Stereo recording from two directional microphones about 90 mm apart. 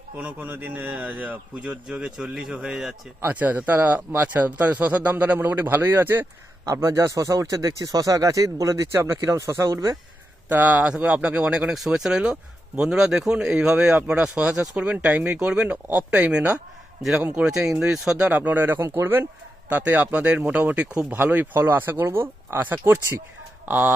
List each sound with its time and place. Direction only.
0.2 s speech: 20° right (ahead or behind)
6.7 s speech: 35° right (ahead or behind)
10.5 s speech: 20° right (ahead or behind)
17.0 s a man's voice: 5° right (ahead or behind); by 19.3 s 25° right (ahead or behind)
19.6 s speech: 15° right (ahead or behind)